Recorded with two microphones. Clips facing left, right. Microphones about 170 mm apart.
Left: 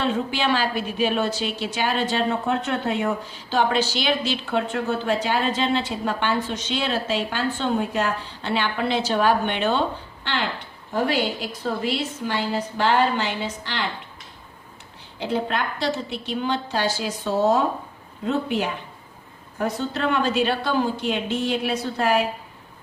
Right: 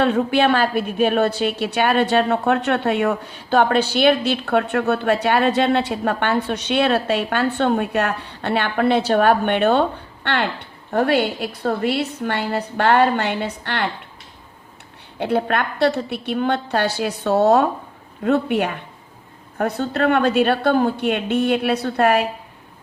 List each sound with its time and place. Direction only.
0.0 s a woman's voice: 60° right (ahead or behind)
15.2 s a woman's voice: 60° right (ahead or behind)